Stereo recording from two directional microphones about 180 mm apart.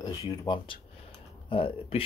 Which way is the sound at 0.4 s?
25° left (ahead or behind).